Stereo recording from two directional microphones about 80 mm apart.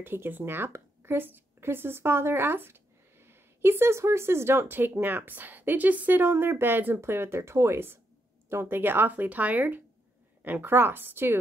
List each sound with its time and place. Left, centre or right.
0.0 s speech: right